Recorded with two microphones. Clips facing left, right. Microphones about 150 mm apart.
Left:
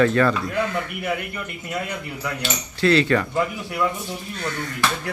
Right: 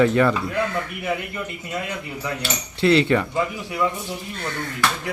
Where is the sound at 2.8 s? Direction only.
20° right (ahead or behind).